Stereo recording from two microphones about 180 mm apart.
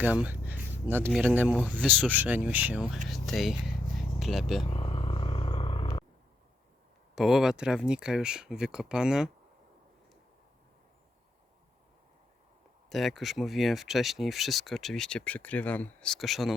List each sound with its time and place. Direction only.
0.0 s speech: 10° right (ahead or behind)
3.1 s a sound: centre (ahead or behind)
4.6 s vehicle: 30° left (ahead or behind)
7.2 s speech: centre (ahead or behind)
12.9 s speech: centre (ahead or behind)